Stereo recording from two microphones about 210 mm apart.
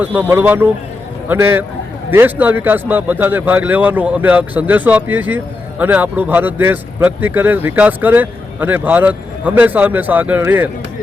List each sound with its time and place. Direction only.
0.0 s speech: 10° right (ahead or behind)